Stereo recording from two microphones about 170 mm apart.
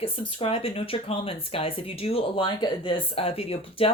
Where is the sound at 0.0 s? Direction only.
35° left (ahead or behind).